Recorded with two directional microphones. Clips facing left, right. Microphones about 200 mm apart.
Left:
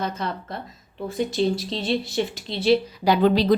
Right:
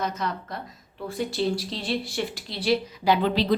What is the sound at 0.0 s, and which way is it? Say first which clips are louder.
Speech: left 1 dB; 30° left (ahead or behind).